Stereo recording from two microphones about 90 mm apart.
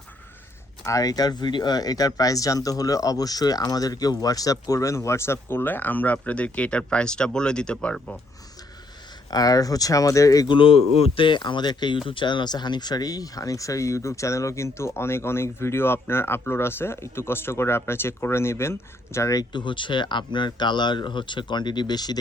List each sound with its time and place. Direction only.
0.9 s speech: 40° left (ahead or behind); by 8.2 s 10° left (ahead or behind)
9.3 s speech: 45° left (ahead or behind)
10.5 s speech: 80° left; by 11.9 s 55° left (ahead or behind)
12.0 s speech: 65° left (ahead or behind); by 19.5 s 35° left (ahead or behind)
19.5 s speech: 65° left (ahead or behind)